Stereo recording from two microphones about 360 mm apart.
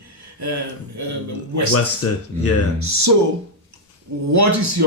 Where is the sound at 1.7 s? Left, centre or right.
Left.